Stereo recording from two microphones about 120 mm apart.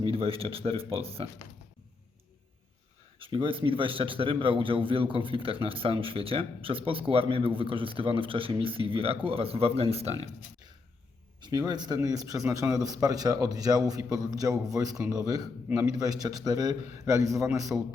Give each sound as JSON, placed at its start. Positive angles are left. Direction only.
{"t": 0.0, "sound": "a man's voice", "side_deg": -50}
{"t": 3.2, "sound": "a man's voice", "side_deg": -50}
{"t": 11.3, "sound": "a man's voice", "side_deg": -40}